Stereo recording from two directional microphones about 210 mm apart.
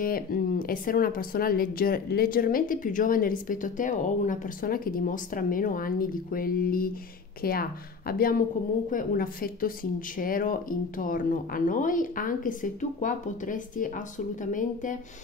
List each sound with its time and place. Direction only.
0.0 s speech: 45° left (ahead or behind)